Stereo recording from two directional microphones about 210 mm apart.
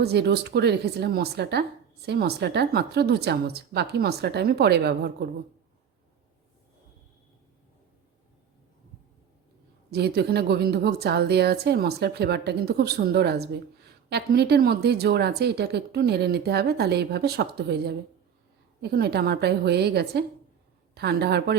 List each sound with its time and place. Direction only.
0.0 s speech: 50° right (ahead or behind)
9.9 s speech: 50° right (ahead or behind)